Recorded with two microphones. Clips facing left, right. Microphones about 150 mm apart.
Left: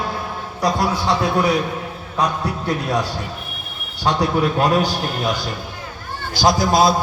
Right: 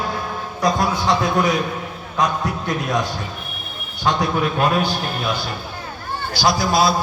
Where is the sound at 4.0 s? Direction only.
35° left (ahead or behind).